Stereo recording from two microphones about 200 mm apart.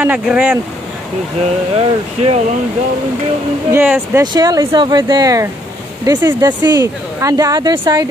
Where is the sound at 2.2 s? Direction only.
35° right (ahead or behind).